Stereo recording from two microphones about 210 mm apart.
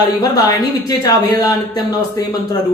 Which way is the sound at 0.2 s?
15° left (ahead or behind).